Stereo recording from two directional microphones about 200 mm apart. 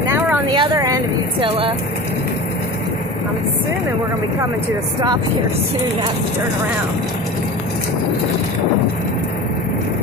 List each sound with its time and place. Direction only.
0.5 s vehicle: 20° right (ahead or behind)